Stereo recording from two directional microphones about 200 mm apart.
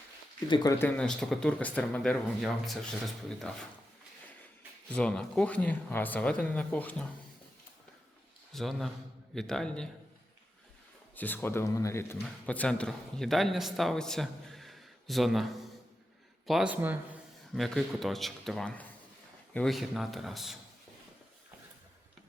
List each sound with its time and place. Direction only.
0.4 s speech: 20° left (ahead or behind)
0.9 s speech: centre (ahead or behind)
4.9 s speech: 5° left (ahead or behind)
8.5 s speech: centre (ahead or behind)
11.1 s speech: 10° left (ahead or behind)
16.5 s speech: 5° right (ahead or behind)